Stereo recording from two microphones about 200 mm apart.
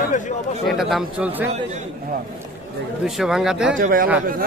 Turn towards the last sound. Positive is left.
turn(degrees=-45)  # may be behind; listen again after turning